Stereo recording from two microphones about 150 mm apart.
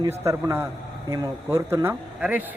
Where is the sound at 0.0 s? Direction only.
20° right (ahead or behind).